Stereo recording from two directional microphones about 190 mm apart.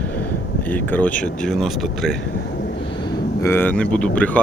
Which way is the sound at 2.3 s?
55° left (ahead or behind).